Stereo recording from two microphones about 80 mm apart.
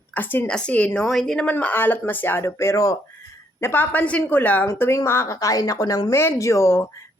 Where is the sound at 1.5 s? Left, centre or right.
Left.